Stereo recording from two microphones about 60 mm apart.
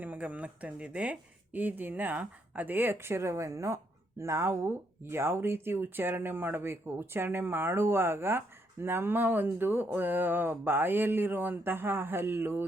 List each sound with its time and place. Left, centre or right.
0.0 s speech: right